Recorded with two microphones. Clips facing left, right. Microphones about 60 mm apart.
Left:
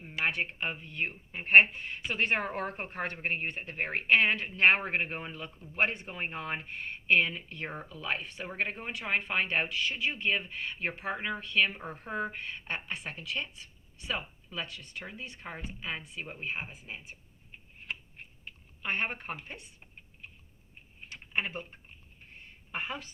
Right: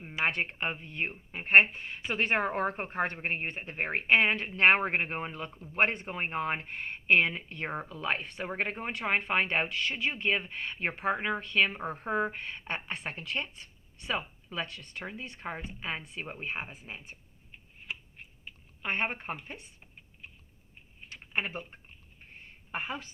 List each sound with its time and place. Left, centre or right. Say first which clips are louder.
0.0 s a sound: right 2 dB; right
0.3 s a woman's voice: even; right
5.7 s speech: right 2 dB; right
17.8 s a sound: left 1 dB; centre
18.8 s a woman's voice: right 1 dB; right
21.3 s speech: even; right
22.7 s a woman's voice: right 1 dB; centre